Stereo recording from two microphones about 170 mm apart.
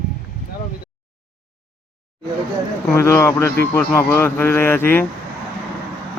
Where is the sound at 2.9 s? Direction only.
15° left (ahead or behind).